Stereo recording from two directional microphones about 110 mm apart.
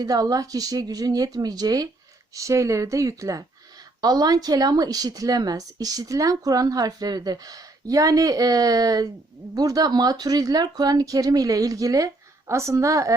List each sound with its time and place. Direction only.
0.0 s a woman's voice: 35° right (ahead or behind)